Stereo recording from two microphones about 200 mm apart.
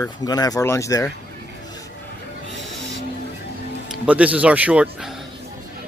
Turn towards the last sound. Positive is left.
turn(degrees=-5)  # may be behind; listen again after turning